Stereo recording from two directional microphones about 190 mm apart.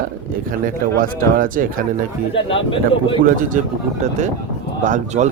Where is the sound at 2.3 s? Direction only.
30° left (ahead or behind).